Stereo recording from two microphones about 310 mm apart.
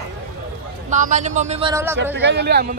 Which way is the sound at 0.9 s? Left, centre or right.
Right.